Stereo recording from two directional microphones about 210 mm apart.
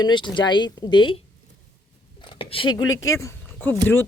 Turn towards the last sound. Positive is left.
turn(degrees=10)  # may be behind; listen again after turning